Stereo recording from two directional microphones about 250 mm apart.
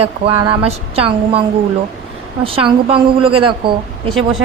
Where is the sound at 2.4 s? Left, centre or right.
Right.